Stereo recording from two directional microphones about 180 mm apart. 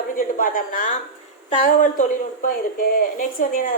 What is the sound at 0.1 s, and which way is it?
A woman's voice, 50° left (ahead or behind).